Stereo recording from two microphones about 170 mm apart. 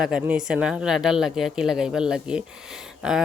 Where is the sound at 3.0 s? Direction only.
5° right (ahead or behind).